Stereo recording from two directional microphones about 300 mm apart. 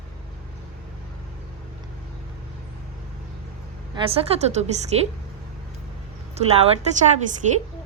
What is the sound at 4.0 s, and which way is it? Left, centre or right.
Speech, centre.